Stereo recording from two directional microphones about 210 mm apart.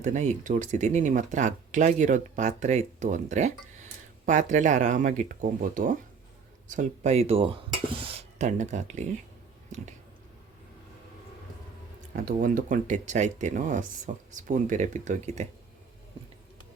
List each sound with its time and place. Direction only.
0.0 s speech: 35° right (ahead or behind)
12.1 s speech: 40° right (ahead or behind)